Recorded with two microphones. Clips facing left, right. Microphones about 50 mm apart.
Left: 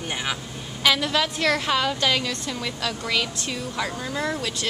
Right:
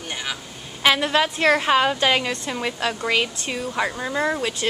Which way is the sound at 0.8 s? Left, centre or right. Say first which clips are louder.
Right 3 dB; right.